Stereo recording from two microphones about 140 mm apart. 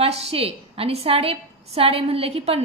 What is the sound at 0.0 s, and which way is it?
A woman's voice, 45° right (ahead or behind).